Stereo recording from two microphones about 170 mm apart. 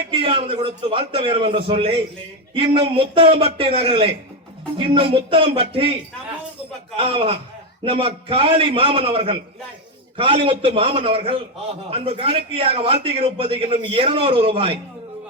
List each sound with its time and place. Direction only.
0.1 s a man's voice: 30° right (ahead or behind)
6.9 s a man's voice: 35° right (ahead or behind)